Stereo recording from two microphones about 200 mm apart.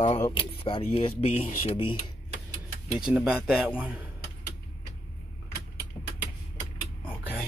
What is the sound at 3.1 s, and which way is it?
Speech, 5° right (ahead or behind).